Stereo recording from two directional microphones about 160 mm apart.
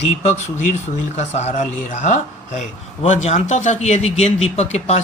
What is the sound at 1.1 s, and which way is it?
A man's voice, 45° left (ahead or behind).